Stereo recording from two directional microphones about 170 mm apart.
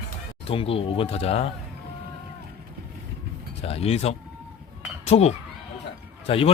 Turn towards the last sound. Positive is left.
turn(degrees=35)  # may be behind; listen again after turning